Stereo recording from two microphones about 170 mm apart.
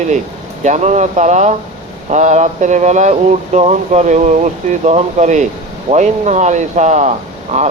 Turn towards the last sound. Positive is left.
turn(degrees=-40)  # may be behind; listen again after turning